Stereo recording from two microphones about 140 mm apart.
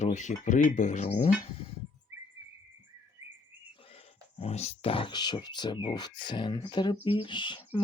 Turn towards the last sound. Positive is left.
turn(degrees=35)  # may be behind; listen again after turning